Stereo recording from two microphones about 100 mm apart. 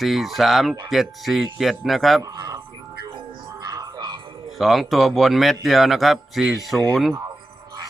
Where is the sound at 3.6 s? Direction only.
40° right (ahead or behind).